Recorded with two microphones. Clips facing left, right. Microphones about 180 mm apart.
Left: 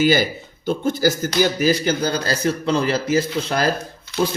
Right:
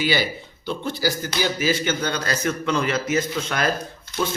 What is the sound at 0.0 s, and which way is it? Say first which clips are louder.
Speech: left 6 dB; 45° left (ahead or behind).